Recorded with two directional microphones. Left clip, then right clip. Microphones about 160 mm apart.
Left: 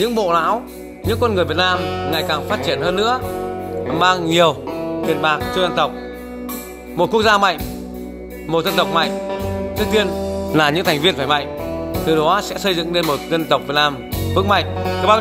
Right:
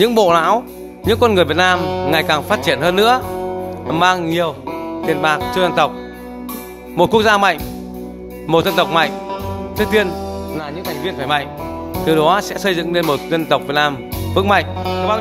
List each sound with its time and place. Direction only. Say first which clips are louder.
0.0 s speech: right 4 dB; 25° right (ahead or behind)
4.3 s a man's voice: left 4 dB; 5° left (ahead or behind)
5.0 s speech: right 2 dB; 10° right (ahead or behind)
7.0 s speech: right 2 dB; 15° right (ahead or behind)
10.5 s a man's voice: left 14 dB; 20° left (ahead or behind)
11.1 s speech: even; 5° right (ahead or behind)